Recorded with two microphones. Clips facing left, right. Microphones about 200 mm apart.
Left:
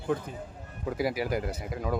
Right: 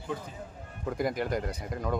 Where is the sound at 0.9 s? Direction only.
5° left (ahead or behind).